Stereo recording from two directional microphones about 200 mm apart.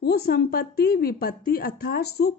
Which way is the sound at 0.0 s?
50° left (ahead or behind).